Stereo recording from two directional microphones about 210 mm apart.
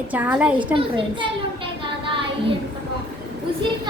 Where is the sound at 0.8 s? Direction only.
25° right (ahead or behind).